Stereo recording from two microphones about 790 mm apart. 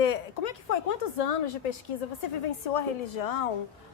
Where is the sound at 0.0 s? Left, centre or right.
Left.